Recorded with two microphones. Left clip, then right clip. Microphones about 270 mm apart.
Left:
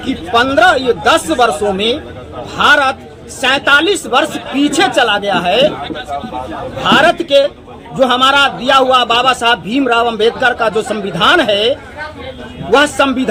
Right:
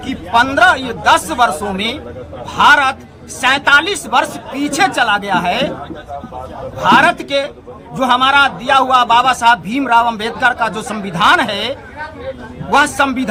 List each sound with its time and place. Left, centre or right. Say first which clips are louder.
0.3 s a man's voice: left 1 dB; right
6.8 s a man's voice: even; right
12.7 s a man's voice: left 2 dB; right